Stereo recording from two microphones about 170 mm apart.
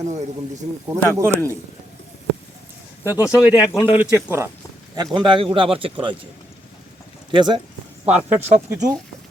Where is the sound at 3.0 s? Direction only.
20° left (ahead or behind).